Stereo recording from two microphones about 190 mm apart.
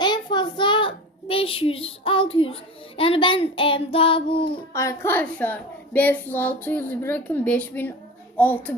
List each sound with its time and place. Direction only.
0.0 s a child's voice: 25° left (ahead or behind)
3.0 s child singing: 25° left (ahead or behind)
4.7 s a woman's voice: 15° left (ahead or behind)